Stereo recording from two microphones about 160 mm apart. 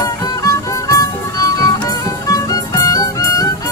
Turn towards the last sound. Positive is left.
turn(degrees=20)  # may be behind; listen again after turning